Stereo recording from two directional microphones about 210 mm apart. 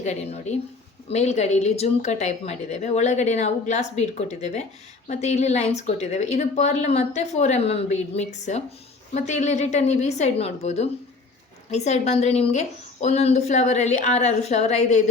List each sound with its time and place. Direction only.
0.0 s speech: 35° left (ahead or behind)